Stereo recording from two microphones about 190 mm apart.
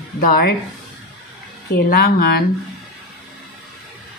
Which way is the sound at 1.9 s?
55° left (ahead or behind).